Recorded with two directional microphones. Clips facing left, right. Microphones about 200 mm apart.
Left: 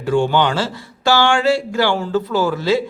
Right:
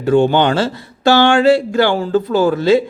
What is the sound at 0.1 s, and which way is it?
Speech, 20° right (ahead or behind).